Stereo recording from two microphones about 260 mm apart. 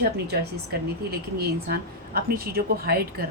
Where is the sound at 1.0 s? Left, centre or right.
Right.